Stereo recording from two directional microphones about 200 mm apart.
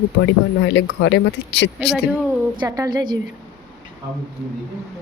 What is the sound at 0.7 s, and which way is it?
Speech, 60° left (ahead or behind).